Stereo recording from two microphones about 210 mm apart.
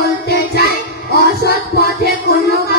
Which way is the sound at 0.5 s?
50° left (ahead or behind).